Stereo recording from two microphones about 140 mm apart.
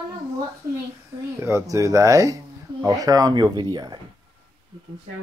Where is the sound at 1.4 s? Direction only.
20° right (ahead or behind).